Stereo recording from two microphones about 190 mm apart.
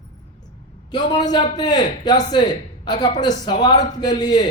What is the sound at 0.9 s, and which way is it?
A man's voice, 20° left (ahead or behind).